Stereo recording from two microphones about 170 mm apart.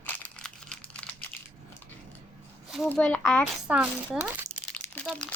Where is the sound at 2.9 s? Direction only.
5° left (ahead or behind).